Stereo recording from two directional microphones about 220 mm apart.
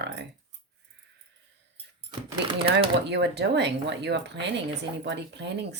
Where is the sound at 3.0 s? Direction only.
50° right (ahead or behind).